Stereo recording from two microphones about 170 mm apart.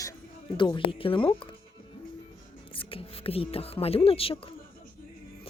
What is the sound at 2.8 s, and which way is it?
Speech, 30° left (ahead or behind).